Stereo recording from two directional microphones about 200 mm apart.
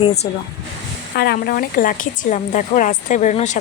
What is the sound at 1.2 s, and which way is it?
Speech, 50° left (ahead or behind).